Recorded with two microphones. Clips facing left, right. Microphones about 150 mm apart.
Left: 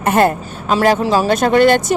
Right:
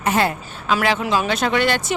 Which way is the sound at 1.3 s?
45° left (ahead or behind).